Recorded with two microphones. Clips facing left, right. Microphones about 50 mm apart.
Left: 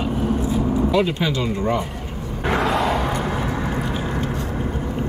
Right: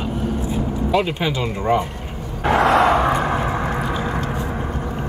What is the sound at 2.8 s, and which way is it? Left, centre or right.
Vehicle, right.